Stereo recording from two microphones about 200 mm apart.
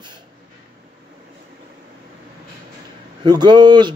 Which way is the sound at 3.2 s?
20° right (ahead or behind).